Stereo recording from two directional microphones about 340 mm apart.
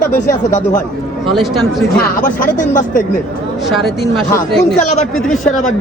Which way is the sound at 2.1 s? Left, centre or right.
Left.